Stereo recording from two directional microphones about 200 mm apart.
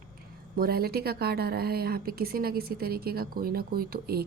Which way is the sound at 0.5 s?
50° right (ahead or behind).